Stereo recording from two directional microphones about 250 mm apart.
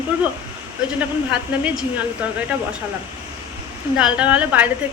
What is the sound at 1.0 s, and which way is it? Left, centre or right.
Speech, centre.